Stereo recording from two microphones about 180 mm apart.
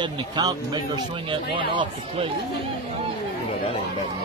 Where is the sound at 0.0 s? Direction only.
20° right (ahead or behind).